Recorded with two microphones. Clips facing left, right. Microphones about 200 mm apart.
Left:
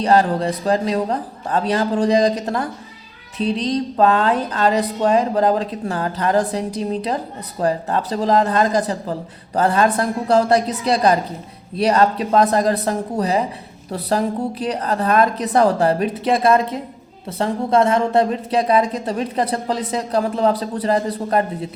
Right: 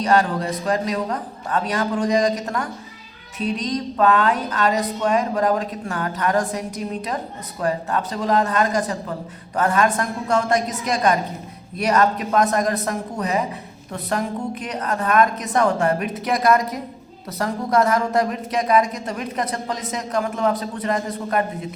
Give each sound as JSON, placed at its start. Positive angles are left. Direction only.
{"t": 0.0, "sound": "a woman's voice", "side_deg": 30}